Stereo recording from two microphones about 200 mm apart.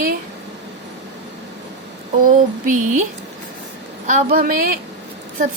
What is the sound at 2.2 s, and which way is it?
Speech, 40° right (ahead or behind).